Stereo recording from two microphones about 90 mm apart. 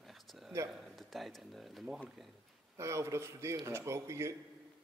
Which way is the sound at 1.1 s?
Centre (ahead or behind).